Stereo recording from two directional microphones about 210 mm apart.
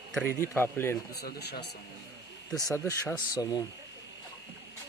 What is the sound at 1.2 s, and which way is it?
Speech, 50° left (ahead or behind).